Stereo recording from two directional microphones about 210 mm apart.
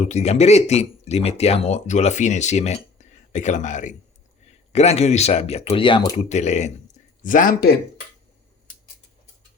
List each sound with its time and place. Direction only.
0.0 s speech: 30° left (ahead or behind)